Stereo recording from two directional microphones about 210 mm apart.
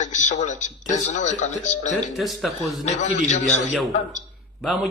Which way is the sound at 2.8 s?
35° left (ahead or behind).